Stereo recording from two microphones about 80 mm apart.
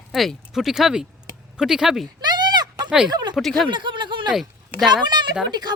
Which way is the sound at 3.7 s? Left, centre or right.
Right.